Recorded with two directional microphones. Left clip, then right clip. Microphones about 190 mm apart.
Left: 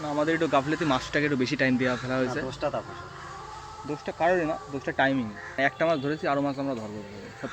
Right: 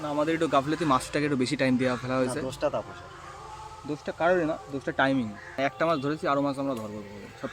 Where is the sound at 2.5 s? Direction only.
60° right (ahead or behind).